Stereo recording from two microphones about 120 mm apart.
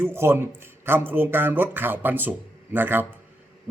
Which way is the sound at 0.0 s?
20° right (ahead or behind).